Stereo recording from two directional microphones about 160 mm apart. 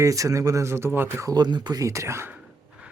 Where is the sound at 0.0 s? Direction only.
20° right (ahead or behind).